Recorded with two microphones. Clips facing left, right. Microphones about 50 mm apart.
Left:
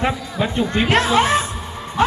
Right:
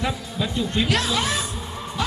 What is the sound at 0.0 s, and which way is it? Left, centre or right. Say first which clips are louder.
Speech: left 5 dB; left.